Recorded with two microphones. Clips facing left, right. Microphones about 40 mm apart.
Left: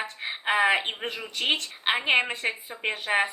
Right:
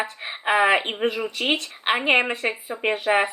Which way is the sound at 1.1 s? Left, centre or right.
Right.